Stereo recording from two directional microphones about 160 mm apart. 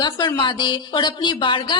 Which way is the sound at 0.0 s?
30° left (ahead or behind).